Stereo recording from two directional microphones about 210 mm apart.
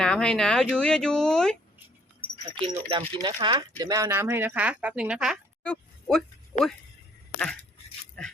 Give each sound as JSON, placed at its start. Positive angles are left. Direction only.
{"t": 0.0, "sound": "speech", "side_deg": 5}
{"t": 2.6, "sound": "speech", "side_deg": -25}